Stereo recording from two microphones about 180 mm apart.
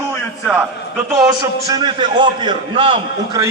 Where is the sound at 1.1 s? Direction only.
20° right (ahead or behind).